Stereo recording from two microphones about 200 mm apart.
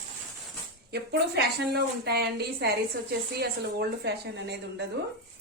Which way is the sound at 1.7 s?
50° right (ahead or behind).